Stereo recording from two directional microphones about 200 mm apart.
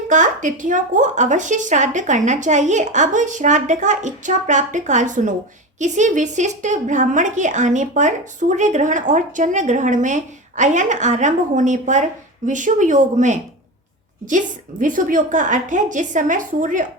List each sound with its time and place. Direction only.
0.1 s a woman's voice: 40° right (ahead or behind)